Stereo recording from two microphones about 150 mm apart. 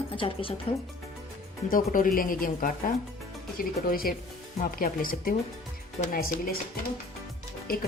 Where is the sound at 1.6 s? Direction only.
65° left (ahead or behind).